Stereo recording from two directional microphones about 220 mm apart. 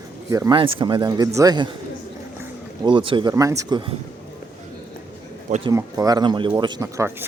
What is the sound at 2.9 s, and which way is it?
Speech, 20° right (ahead or behind).